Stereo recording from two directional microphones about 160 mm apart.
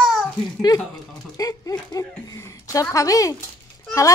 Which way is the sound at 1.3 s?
20° left (ahead or behind).